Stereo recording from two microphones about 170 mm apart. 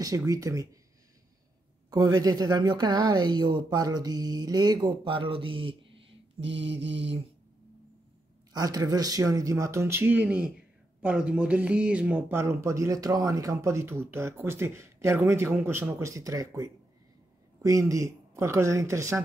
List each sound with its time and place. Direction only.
0.3 s speech: 20° right (ahead or behind)
1.9 s speech: 20° right (ahead or behind)
6.4 s mantra: 90° right
8.5 s speech: 20° right (ahead or behind)